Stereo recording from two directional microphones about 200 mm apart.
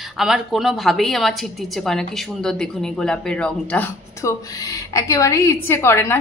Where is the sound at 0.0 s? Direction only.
Centre (ahead or behind).